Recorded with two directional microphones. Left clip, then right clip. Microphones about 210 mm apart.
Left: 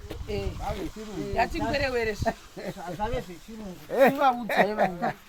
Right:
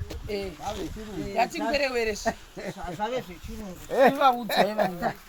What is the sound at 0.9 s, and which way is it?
Speech, 50° left (ahead or behind).